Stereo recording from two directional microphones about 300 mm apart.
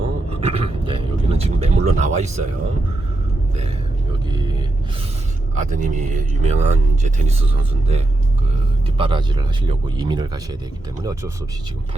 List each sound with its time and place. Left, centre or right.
0.0 s speech: centre
4.3 s a sound: centre
5.5 s speech: right